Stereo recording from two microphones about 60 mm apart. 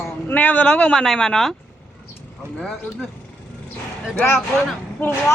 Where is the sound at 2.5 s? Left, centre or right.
Centre.